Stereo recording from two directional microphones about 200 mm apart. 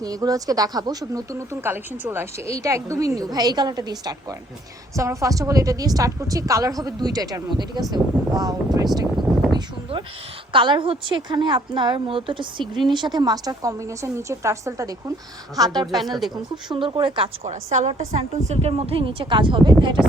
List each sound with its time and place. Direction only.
0.0 s a woman's voice: 20° right (ahead or behind)
9.5 s a sound: 20° right (ahead or behind)
10.5 s a woman's voice: 25° right (ahead or behind)
16.0 s speech: centre (ahead or behind)
16.3 s a woman's voice: 25° right (ahead or behind)